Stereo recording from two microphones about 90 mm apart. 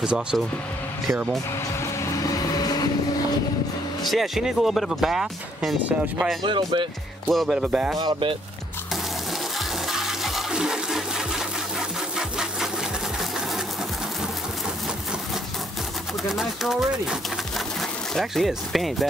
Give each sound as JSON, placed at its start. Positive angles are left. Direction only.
{"t": 0.0, "sound": "speech", "side_deg": -10}
{"t": 2.1, "sound": "music", "side_deg": 40}
{"t": 4.1, "sound": "speech", "side_deg": -5}
{"t": 6.4, "sound": "speech", "side_deg": -60}
{"t": 7.2, "sound": "speech", "side_deg": 0}
{"t": 8.0, "sound": "speech", "side_deg": -65}
{"t": 9.9, "sound": "toilet flush", "side_deg": -5}
{"t": 12.2, "sound": "sewing machine", "side_deg": -5}
{"t": 16.3, "sound": "speech", "side_deg": 0}